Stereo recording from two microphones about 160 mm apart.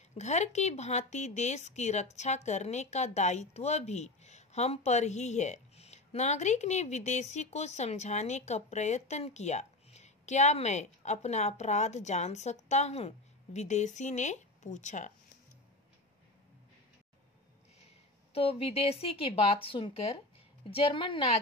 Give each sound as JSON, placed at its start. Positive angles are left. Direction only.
{"t": 0.2, "sound": "speech", "side_deg": 45}
{"t": 17.8, "sound": "a woman's voice", "side_deg": 40}